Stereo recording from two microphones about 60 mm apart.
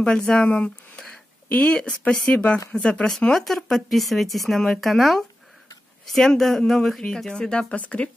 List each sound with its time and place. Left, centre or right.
0.0 s speech: centre